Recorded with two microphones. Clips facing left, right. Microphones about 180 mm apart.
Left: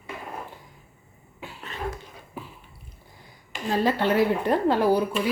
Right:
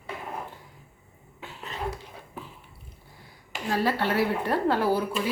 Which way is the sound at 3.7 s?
20° left (ahead or behind).